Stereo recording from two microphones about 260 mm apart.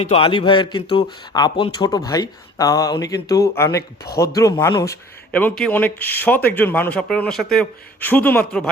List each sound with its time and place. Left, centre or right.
0.0 s speech: left; by 8.7 s centre